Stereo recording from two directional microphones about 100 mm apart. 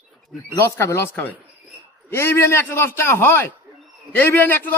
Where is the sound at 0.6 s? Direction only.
30° left (ahead or behind).